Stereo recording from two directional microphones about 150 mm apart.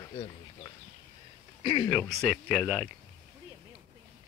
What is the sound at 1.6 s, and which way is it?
Speech, 40° left (ahead or behind).